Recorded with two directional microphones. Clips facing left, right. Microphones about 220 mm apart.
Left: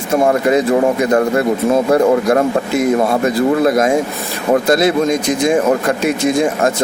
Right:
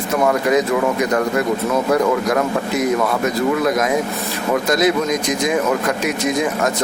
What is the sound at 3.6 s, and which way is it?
Speech, 30° left (ahead or behind).